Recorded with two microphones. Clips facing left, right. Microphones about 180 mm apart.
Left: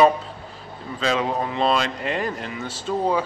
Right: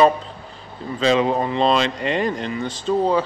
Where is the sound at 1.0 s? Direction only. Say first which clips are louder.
Right 5 dB; centre (ahead or behind).